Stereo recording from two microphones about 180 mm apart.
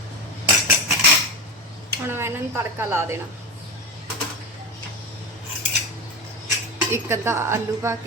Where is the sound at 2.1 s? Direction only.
15° right (ahead or behind).